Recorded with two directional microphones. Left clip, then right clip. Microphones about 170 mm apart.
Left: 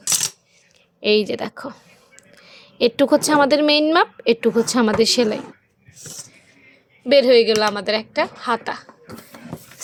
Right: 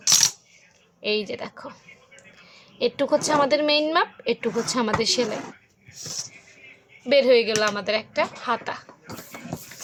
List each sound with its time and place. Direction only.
1.0 s a woman's voice: 45° left (ahead or behind)
7.1 s a woman's voice: 40° left (ahead or behind)